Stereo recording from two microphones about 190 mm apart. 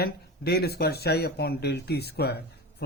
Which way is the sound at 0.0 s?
55° left (ahead or behind).